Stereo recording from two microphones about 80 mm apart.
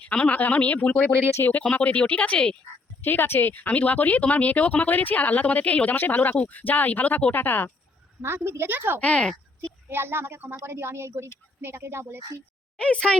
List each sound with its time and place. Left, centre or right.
0.0 s speech: centre
3.0 s speech: left
8.2 s a woman's voice: right
9.0 s speech: centre
9.9 s a woman's voice: right
12.8 s speech: centre